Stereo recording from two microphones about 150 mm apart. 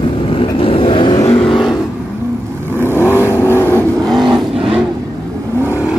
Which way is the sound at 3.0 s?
15° right (ahead or behind).